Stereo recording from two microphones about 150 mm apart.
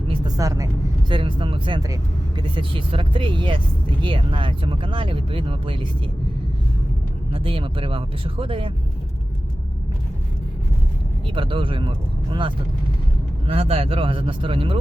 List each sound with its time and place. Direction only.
0.1 s vehicle: 25° right (ahead or behind)
1.1 s speech: 35° right (ahead or behind)
7.3 s speech: 35° right (ahead or behind)
11.3 s speech: 35° right (ahead or behind)